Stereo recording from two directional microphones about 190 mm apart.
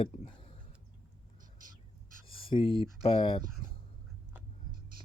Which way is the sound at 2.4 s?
25° left (ahead or behind).